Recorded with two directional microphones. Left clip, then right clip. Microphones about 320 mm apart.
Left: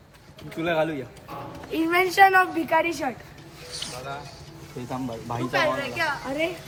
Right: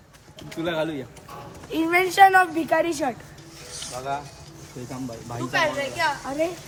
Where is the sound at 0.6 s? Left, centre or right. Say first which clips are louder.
Left 2 dB; centre.